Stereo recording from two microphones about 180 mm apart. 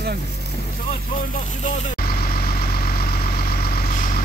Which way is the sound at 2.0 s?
55° left (ahead or behind).